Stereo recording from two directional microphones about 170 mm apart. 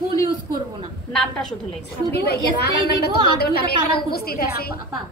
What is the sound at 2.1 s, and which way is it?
A woman's voice, 70° left (ahead or behind).